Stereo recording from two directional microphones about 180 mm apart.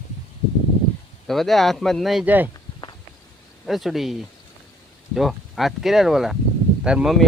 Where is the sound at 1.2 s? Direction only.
Centre (ahead or behind).